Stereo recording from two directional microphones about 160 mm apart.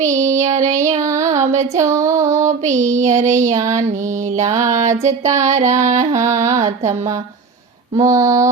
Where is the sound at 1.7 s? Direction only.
20° right (ahead or behind).